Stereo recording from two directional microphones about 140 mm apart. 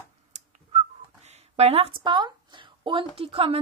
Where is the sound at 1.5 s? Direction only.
45° right (ahead or behind).